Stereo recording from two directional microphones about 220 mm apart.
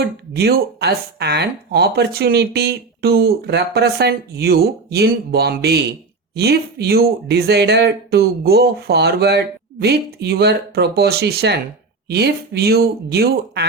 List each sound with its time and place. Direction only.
0.3 s speech: 45° right (ahead or behind)